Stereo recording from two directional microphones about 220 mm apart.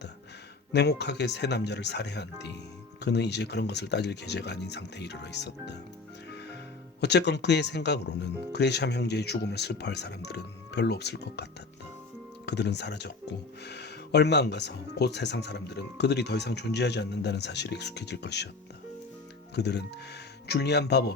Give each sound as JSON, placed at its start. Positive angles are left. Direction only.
{"t": 0.7, "sound": "speech", "side_deg": 50}
{"t": 7.0, "sound": "speech", "side_deg": 50}
{"t": 12.5, "sound": "speech", "side_deg": 50}
{"t": 19.5, "sound": "speech", "side_deg": 50}